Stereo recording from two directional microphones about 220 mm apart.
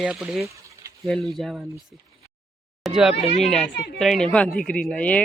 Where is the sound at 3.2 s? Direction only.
30° left (ahead or behind).